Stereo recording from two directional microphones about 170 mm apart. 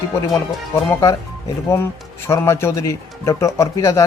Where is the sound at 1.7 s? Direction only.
15° left (ahead or behind).